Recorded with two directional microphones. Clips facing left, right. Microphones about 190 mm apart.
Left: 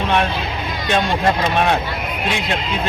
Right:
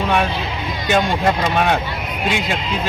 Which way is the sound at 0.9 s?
5° right (ahead or behind).